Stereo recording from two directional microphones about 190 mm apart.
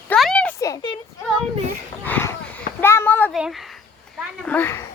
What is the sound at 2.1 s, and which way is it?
Speech, 10° left (ahead or behind).